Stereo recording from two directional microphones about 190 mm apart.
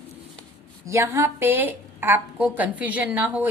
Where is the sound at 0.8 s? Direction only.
15° right (ahead or behind).